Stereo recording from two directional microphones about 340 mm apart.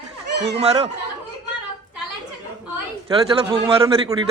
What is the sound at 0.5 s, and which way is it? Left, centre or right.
Speech, centre.